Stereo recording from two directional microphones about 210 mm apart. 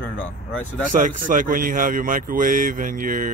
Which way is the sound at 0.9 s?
35° right (ahead or behind).